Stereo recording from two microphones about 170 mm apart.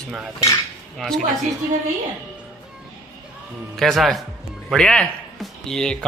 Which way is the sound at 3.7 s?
Centre (ahead or behind).